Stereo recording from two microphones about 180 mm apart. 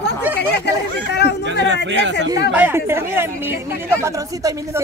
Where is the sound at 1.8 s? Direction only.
85° right.